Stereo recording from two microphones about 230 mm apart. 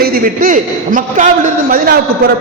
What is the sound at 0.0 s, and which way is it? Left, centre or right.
A man's voice, right.